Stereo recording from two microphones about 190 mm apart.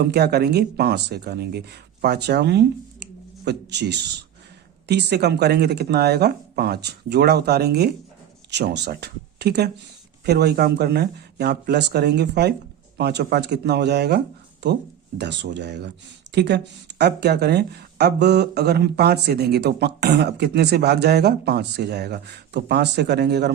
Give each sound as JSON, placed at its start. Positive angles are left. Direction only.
{"t": 0.0, "sound": "speech", "side_deg": -55}
{"t": 15.2, "sound": "speech", "side_deg": -65}